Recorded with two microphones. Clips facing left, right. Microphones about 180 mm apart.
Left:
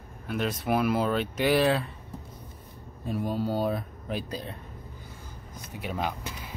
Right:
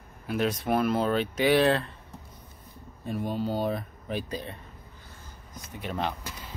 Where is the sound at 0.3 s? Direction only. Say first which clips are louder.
Right 1 dB; centre (ahead or behind).